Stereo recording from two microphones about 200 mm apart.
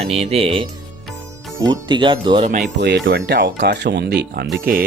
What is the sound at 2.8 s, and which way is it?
Speech, 60° right (ahead or behind).